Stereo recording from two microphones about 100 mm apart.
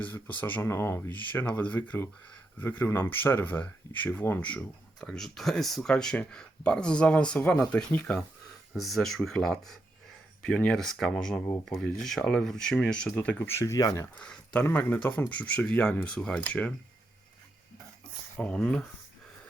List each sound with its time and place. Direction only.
0.0 s speech: 15° left (ahead or behind)
8.7 s speech: centre (ahead or behind)
13.2 s speech: 20° left (ahead or behind)
14.2 s speech: 15° left (ahead or behind)
18.3 s speech: 10° left (ahead or behind)